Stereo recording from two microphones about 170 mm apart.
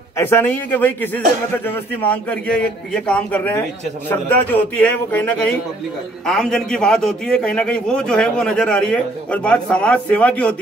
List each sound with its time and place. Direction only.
0.2 s a man's voice: 10° left (ahead or behind)